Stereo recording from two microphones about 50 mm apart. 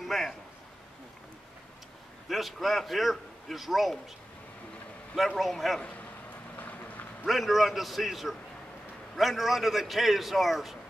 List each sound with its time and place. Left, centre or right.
0.0 s a sound: centre
2.2 s a man's voice: centre
5.5 s a man's voice: centre
6.5 s vehicle: left
7.2 s a man's voice: centre